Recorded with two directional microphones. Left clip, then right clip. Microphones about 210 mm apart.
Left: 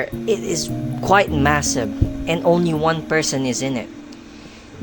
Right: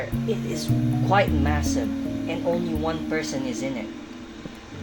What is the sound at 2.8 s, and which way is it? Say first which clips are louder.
Speech: left 8 dB; 50° left (ahead or behind).